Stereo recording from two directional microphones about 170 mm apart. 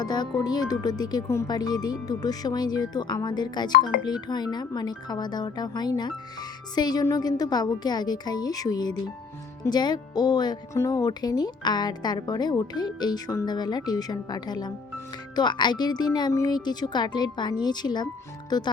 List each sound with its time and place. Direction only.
0.0 s speech: 25° left (ahead or behind)